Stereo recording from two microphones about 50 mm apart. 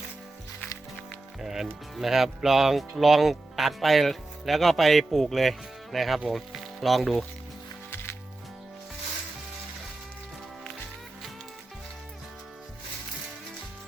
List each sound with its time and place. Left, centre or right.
1.4 s speech: centre
7.9 s music: left